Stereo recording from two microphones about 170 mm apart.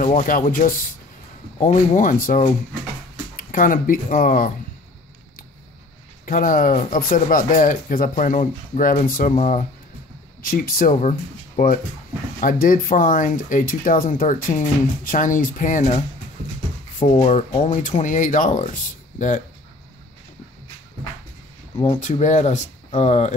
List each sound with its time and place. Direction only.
0.0 s speech: 50° left (ahead or behind)
6.2 s speech: 50° left (ahead or behind)
10.4 s speech: 60° left (ahead or behind)
17.3 s speech: 45° left (ahead or behind)
21.8 s speech: 45° left (ahead or behind)